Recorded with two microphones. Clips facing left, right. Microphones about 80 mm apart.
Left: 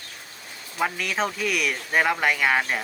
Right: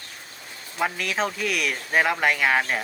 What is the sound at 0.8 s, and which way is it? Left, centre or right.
Speech, centre.